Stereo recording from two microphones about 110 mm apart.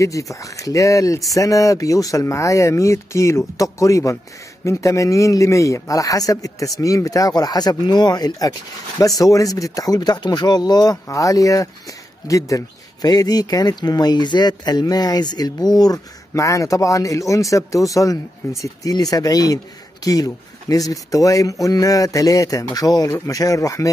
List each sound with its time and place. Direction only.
0.0 s speech: 30° left (ahead or behind)